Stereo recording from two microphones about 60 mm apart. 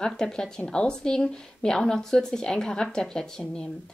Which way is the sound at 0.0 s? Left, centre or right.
Centre.